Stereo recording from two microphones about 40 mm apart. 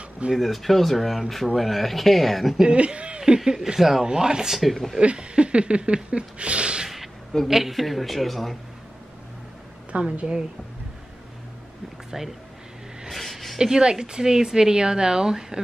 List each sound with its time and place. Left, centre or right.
0.3 s speech: centre
2.6 s speech: right
3.3 s speech: centre
4.5 s speech: centre
5.0 s a sound: right
7.4 s speech: centre
9.9 s a woman's voice: right
12.1 s speech: centre
13.1 s a sound: centre
13.6 s speech: right